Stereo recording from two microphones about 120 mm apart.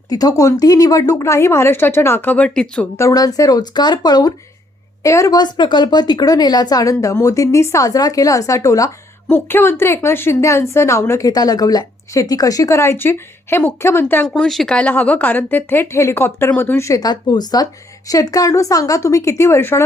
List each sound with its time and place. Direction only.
0.1 s speech: 30° left (ahead or behind); by 2.8 s 10° left (ahead or behind)
3.0 s speech: 30° left (ahead or behind)
11.3 s speech: 30° left (ahead or behind)
14.3 s speech: centre (ahead or behind); by 19.8 s 20° left (ahead or behind)